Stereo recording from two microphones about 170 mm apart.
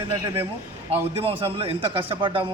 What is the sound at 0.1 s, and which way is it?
A man's voice, 30° right (ahead or behind).